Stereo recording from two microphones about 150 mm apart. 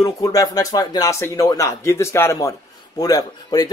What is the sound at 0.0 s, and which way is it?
Speech, 25° left (ahead or behind).